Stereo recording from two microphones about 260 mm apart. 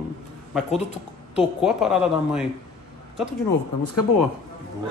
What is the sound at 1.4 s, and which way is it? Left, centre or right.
A woman's voice, centre.